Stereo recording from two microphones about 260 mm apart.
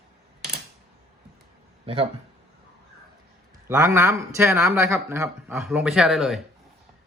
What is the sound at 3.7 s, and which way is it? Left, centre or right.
Speech, centre.